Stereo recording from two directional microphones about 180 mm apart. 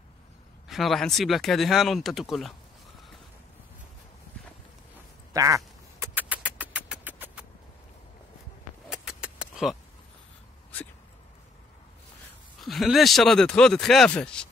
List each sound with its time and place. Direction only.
0.7 s speech: centre (ahead or behind)
5.3 s speech: 20° right (ahead or behind)
5.9 s music: 10° right (ahead or behind)
8.8 s keys jangling: 5° right (ahead or behind)
12.5 s speech: centre (ahead or behind)